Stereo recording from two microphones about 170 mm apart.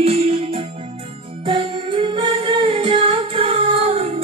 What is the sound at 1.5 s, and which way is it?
Music, 30° right (ahead or behind).